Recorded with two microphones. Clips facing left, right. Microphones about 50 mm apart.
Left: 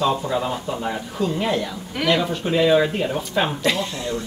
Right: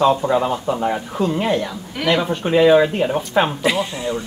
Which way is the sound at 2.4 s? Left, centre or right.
Centre.